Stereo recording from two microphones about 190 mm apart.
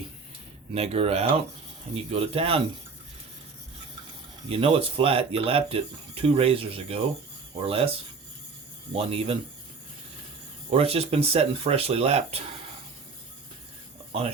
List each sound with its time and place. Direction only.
0.7 s speech: 30° right (ahead or behind)
4.4 s speech: 30° right (ahead or behind)
10.7 s speech: 30° right (ahead or behind)
14.1 s speech: 35° right (ahead or behind)